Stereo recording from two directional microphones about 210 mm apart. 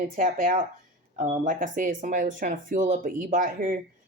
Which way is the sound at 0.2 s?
40° right (ahead or behind).